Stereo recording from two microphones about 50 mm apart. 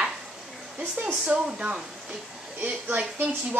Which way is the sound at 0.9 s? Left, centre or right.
Right.